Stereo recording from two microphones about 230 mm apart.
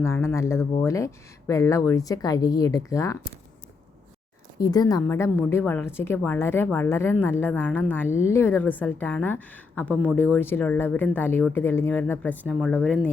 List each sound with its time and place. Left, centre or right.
0.0 s a woman's voice: centre
4.5 s a woman's voice: centre